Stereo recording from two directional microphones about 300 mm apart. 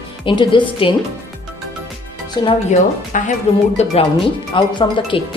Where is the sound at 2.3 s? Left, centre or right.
Centre.